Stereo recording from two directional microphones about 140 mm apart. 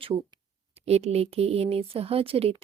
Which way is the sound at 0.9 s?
50° right (ahead or behind).